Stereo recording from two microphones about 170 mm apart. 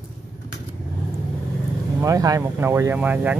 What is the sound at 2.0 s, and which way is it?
A man's voice, 20° right (ahead or behind).